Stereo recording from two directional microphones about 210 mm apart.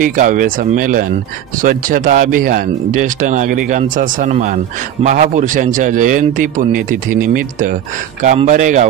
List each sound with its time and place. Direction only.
0.0 s speech: 40° right (ahead or behind)
8.2 s speech: 35° right (ahead or behind)